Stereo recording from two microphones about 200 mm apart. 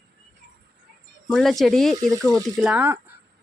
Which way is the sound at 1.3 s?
Centre (ahead or behind).